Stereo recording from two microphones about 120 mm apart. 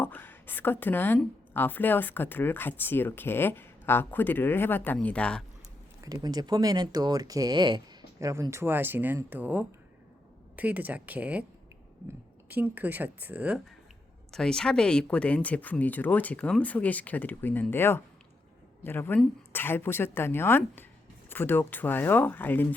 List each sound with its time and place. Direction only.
0.0 s speech: 15° left (ahead or behind)
6.0 s speech: 30° right (ahead or behind)
8.2 s speech: 25° right (ahead or behind)
12.5 s speech: 15° right (ahead or behind)
14.3 s speech: 5° left (ahead or behind)